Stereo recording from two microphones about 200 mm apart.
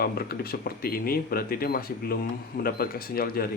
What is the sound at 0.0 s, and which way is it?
Speech, 50° left (ahead or behind).